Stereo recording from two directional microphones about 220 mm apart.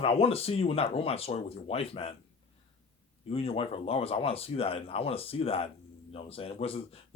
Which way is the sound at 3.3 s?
25° left (ahead or behind).